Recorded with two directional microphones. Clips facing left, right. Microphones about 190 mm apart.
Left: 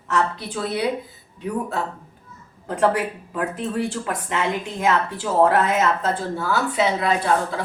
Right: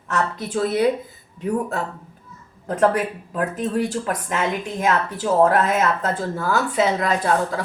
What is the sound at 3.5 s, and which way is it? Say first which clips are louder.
Speech: right 2 dB; 40° right (ahead or behind).